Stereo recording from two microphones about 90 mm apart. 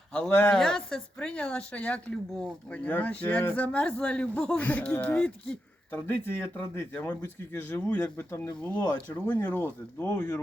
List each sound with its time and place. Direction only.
0.1 s speech: 15° left (ahead or behind)
0.5 s speech: 5° left (ahead or behind)
6.1 s speech: 25° left (ahead or behind)